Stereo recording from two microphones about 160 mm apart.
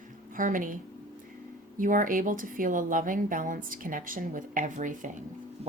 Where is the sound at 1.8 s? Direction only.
60° right (ahead or behind).